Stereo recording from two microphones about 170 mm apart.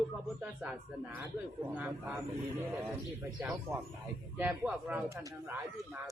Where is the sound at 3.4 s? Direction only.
10° right (ahead or behind).